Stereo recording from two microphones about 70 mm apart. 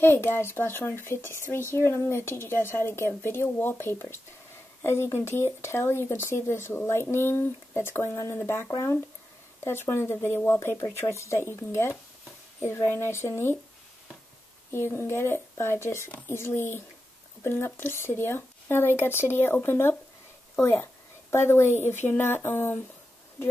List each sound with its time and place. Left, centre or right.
0.0 s speech: left
14.7 s speech: left
21.3 s speech: left